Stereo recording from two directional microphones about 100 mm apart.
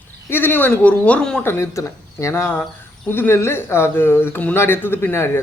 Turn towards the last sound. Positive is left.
turn(degrees=25)  # may be behind; listen again after turning